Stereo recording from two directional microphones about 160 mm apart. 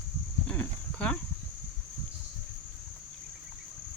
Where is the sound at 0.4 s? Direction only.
10° left (ahead or behind).